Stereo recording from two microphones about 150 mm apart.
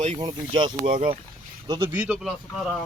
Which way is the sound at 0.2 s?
30° right (ahead or behind).